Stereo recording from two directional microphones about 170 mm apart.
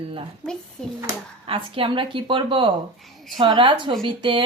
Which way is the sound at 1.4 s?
30° right (ahead or behind).